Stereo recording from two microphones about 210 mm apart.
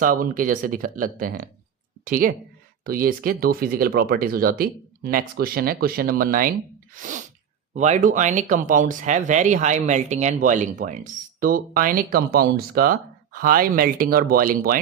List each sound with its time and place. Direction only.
0.0 s speech: 40° right (ahead or behind)